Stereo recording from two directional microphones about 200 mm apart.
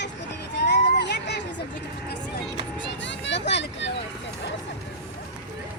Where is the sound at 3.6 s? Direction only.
60° left (ahead or behind).